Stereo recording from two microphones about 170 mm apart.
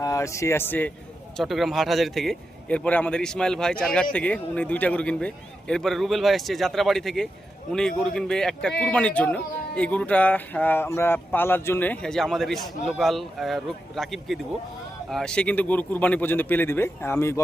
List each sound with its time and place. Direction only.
0.0 s speech: 20° left (ahead or behind)
1.4 s a man's voice: centre (ahead or behind); by 17.4 s 15° left (ahead or behind)